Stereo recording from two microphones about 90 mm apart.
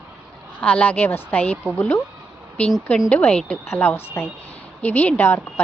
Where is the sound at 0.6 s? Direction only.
15° left (ahead or behind).